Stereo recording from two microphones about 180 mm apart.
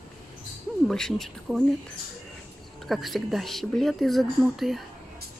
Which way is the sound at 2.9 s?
Centre (ahead or behind).